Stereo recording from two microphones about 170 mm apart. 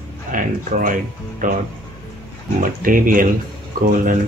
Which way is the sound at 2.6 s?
55° right (ahead or behind).